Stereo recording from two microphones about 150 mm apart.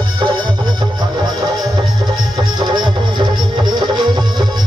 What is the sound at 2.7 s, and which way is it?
Music, 30° right (ahead or behind).